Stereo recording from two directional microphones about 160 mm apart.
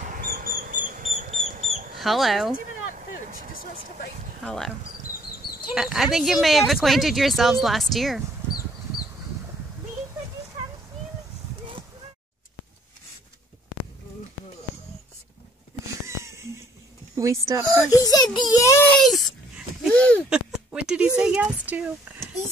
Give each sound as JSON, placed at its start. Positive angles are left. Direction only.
{"t": 0.0, "sound": "mouse", "side_deg": -65}
{"t": 2.0, "sound": "speech", "side_deg": 0}
{"t": 4.5, "sound": "speech", "side_deg": 0}
{"t": 5.8, "sound": "speech", "side_deg": 0}
{"t": 16.1, "sound": "wheeze", "side_deg": -15}
{"t": 17.1, "sound": "speech", "side_deg": -20}
{"t": 17.8, "sound": "a child's voice", "side_deg": 20}
{"t": 18.9, "sound": "speech", "side_deg": 0}
{"t": 20.2, "sound": "speech", "side_deg": -5}